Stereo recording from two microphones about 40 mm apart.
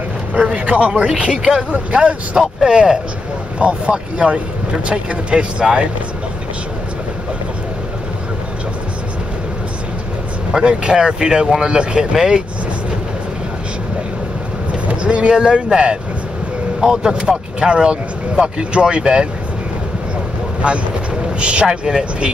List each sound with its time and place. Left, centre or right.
0.6 s speech: right
0.9 s speech: centre
10.5 s speech: right
14.7 s speech: right
20.6 s speech: right